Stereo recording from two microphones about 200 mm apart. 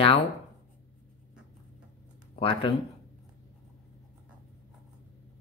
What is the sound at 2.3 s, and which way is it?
Speech, 25° left (ahead or behind).